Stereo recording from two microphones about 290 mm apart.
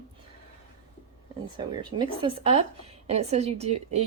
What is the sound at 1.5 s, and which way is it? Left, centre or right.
A woman's voice, centre.